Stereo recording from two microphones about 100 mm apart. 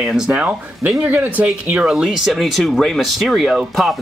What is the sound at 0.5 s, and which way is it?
Speech, 20° right (ahead or behind).